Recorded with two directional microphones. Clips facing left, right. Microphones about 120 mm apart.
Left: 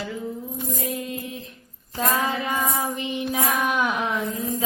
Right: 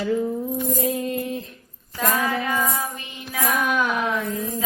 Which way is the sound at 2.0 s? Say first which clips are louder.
Right 1 dB; 25° left (ahead or behind).